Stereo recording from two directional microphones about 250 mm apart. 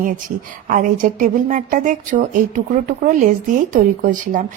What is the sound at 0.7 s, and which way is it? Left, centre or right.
A woman's voice, right.